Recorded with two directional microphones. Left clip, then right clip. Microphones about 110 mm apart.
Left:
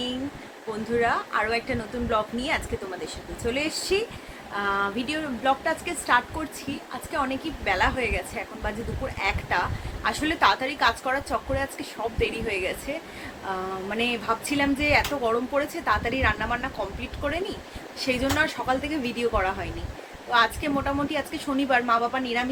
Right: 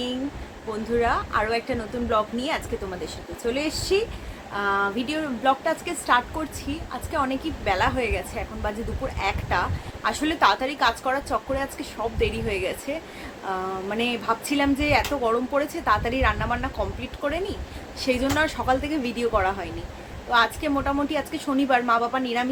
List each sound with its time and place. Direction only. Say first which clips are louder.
0.7 s a woman's voice: right 1 dB; 15° right (ahead or behind)